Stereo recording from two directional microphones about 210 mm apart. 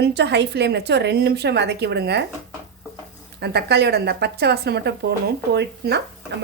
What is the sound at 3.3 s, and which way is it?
Speech, 50° right (ahead or behind).